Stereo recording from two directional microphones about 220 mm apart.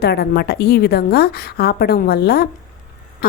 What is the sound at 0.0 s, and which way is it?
A woman's voice, 45° left (ahead or behind).